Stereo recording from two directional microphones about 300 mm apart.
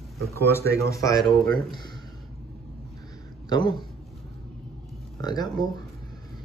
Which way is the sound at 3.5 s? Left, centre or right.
Centre.